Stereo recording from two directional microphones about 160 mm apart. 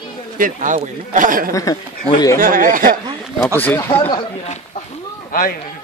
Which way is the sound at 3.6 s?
15° left (ahead or behind).